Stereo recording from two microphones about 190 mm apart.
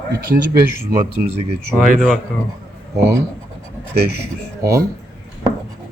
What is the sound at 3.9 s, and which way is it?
Speech, 55° right (ahead or behind).